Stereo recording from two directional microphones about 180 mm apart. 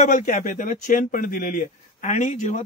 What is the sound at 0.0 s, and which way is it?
A man's voice, 45° left (ahead or behind).